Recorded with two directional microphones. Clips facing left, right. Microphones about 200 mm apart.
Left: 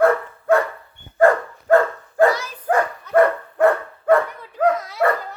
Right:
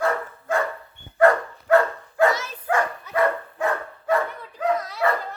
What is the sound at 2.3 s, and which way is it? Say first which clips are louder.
Dog: left 2 dB; 25° right (ahead or behind).